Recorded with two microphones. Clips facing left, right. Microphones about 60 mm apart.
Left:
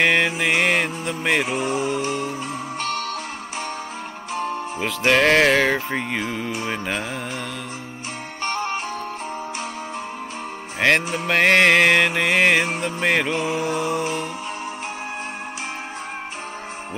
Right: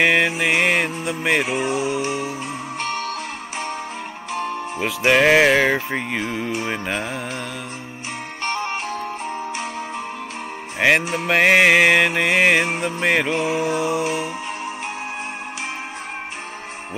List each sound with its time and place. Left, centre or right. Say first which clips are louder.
0.0 s music: right 1 dB; centre
2.8 s music: right 1 dB; right
4.7 s music: right 2 dB; centre
8.5 s music: even; right
10.8 s music: right 1 dB; centre